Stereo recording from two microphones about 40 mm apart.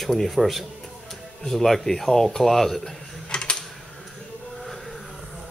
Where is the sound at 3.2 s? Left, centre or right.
Left.